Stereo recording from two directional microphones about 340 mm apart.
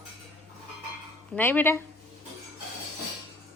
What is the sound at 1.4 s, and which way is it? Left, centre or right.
Speech, centre.